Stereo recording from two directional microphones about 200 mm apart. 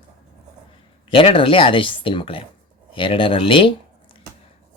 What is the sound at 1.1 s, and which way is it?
Speech, 25° left (ahead or behind).